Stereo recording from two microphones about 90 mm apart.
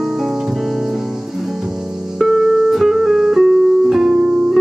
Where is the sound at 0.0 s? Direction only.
Centre (ahead or behind).